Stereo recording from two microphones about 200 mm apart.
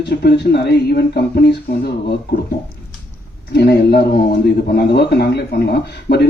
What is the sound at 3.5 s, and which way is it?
A man's voice, 55° left (ahead or behind).